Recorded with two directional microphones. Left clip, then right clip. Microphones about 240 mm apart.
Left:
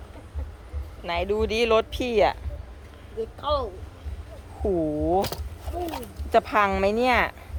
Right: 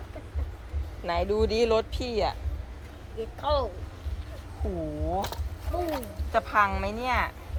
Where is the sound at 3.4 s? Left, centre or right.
Left.